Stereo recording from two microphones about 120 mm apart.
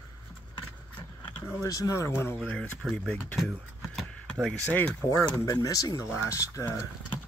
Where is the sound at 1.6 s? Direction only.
30° left (ahead or behind).